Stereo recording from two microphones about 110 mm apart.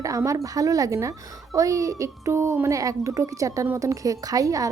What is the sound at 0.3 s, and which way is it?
A woman's voice, 30° right (ahead or behind).